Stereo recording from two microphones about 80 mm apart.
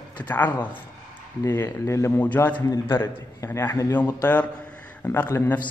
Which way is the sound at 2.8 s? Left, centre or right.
Left.